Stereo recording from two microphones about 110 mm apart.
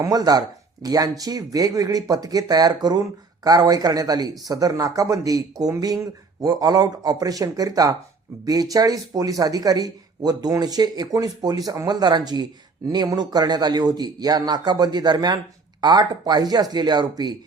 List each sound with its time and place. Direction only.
0.0 s speech: 35° right (ahead or behind)